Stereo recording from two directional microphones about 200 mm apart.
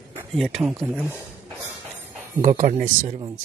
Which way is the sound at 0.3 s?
Centre (ahead or behind).